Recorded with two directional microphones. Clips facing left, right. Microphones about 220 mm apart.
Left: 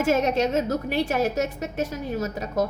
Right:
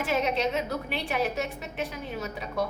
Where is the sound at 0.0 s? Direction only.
45° left (ahead or behind).